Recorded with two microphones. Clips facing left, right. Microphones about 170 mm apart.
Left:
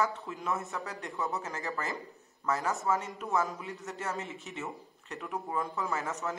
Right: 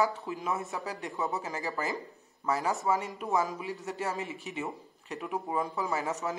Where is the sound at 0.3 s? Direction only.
15° right (ahead or behind).